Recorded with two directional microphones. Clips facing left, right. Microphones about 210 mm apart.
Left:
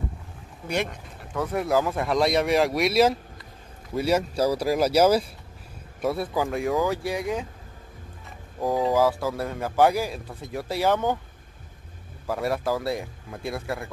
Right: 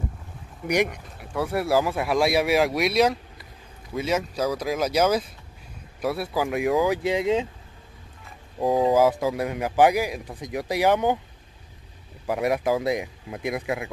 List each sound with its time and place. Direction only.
0.7 s speech: 15° right (ahead or behind)
4.0 s speech: 35° left (ahead or behind)
4.5 s a man's voice: 5° left (ahead or behind)
7.0 s speech: 20° right (ahead or behind)
8.5 s a man's voice: 20° right (ahead or behind)
12.3 s a man's voice: 15° right (ahead or behind)